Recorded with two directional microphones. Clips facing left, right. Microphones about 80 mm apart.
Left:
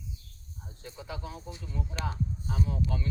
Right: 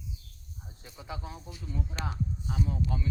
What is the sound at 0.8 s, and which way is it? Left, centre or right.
Speech, centre.